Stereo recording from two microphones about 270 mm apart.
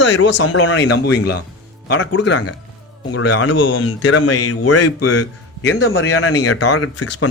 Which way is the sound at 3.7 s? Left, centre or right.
Left.